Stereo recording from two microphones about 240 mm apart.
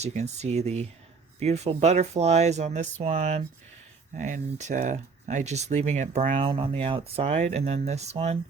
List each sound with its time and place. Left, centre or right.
0.0 s speech: right